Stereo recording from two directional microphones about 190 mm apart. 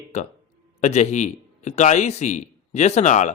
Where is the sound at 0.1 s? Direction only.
35° left (ahead or behind).